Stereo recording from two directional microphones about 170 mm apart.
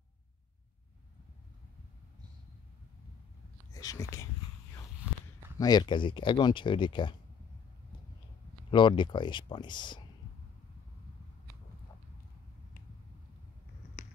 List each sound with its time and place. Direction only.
3.7 s whispering: 20° left (ahead or behind)
5.1 s walk: 5° right (ahead or behind)
5.6 s speech: 25° left (ahead or behind)
8.6 s speech: 30° left (ahead or behind)